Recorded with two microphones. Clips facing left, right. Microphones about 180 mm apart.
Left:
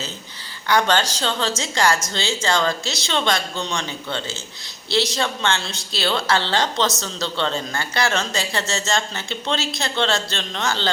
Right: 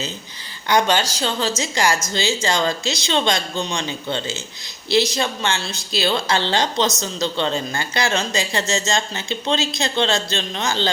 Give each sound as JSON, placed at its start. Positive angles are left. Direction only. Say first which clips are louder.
{"t": 0.7, "sound": "a man's voice", "louder": "right 1 dB", "side_deg": -15}